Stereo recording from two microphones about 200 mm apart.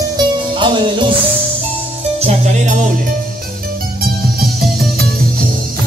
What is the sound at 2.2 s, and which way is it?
Music, 35° right (ahead or behind).